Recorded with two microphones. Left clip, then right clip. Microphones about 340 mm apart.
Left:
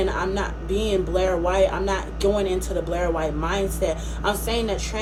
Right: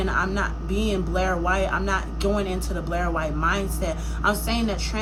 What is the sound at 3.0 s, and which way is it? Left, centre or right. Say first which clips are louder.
A woman's voice: right 3 dB; right.